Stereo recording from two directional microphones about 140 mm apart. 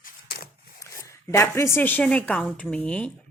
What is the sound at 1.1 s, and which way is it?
A woman's voice, 20° left (ahead or behind).